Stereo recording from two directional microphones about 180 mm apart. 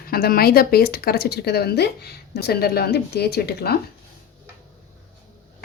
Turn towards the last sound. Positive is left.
turn(degrees=60)  # may be behind; listen again after turning